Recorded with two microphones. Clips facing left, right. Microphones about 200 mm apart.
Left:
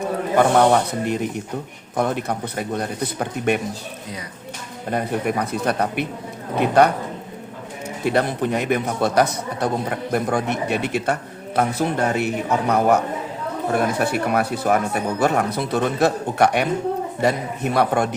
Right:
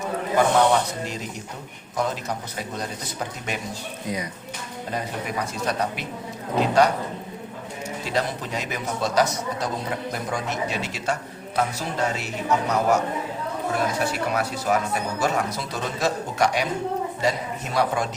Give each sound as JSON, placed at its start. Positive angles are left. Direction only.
{"t": 0.3, "sound": "speech", "side_deg": 55}
{"t": 4.9, "sound": "speech", "side_deg": 55}
{"t": 8.0, "sound": "speech", "side_deg": 60}